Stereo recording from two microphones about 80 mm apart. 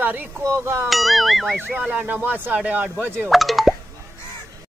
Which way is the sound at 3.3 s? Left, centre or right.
Centre.